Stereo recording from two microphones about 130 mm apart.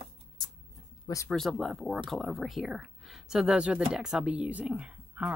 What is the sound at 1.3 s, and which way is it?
Speech, centre (ahead or behind).